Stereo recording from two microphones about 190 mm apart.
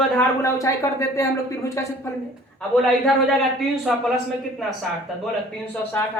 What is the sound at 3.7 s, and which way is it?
Speech, centre (ahead or behind).